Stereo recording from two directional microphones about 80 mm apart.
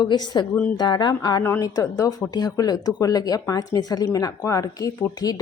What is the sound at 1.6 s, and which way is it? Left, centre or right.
A woman's voice, left.